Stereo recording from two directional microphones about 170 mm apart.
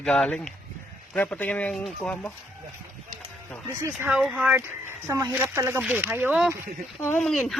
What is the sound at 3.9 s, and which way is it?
Speech, 5° right (ahead or behind).